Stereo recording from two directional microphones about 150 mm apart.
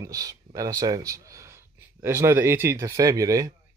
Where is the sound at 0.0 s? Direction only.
25° right (ahead or behind).